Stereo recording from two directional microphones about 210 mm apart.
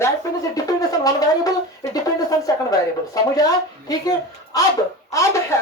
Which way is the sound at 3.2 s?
15° left (ahead or behind).